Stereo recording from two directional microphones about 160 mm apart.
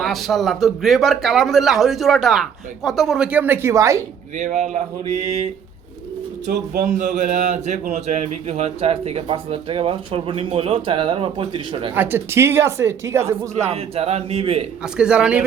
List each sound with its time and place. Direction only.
0.0 s speech: centre (ahead or behind); by 4.0 s 20° right (ahead or behind)
4.4 s speech: 45° right (ahead or behind)
6.8 s speech: 50° right (ahead or behind); by 11.9 s 35° right (ahead or behind)
11.9 s speech: 15° right (ahead or behind)
13.7 s speech: 40° right (ahead or behind)
14.9 s speech: 5° right (ahead or behind)